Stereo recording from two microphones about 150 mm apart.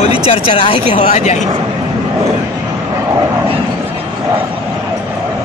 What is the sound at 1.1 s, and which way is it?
Speech, 50° left (ahead or behind).